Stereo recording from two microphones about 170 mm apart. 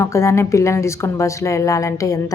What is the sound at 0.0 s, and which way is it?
Speech, 15° left (ahead or behind).